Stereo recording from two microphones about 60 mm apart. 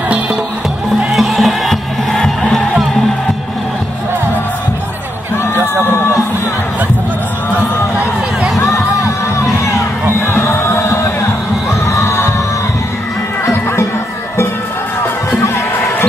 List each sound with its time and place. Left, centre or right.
1.1 s music: centre
10.2 s music: left
11.8 s crowd: left
15.4 s a sound: left